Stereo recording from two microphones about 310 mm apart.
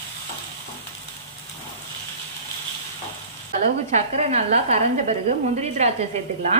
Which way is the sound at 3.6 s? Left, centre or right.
Right.